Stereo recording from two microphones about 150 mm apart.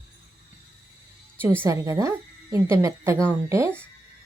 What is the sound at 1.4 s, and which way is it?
A woman's voice, 15° right (ahead or behind).